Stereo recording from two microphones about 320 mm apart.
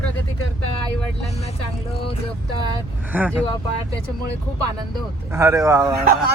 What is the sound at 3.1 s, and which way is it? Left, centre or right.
Speech, centre.